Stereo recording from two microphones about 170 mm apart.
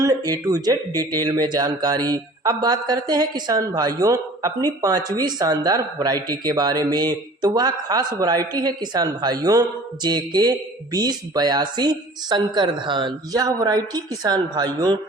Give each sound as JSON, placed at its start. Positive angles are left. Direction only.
{"t": 0.0, "sound": "speech", "side_deg": -20}